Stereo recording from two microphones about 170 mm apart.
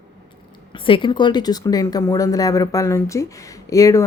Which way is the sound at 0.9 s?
30° left (ahead or behind).